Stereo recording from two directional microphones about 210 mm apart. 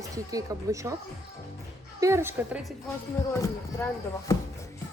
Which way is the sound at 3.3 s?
10° left (ahead or behind).